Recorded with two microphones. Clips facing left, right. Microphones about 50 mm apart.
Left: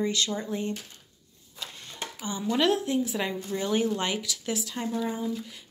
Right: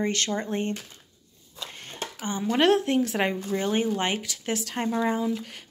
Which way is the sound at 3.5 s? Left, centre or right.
Right.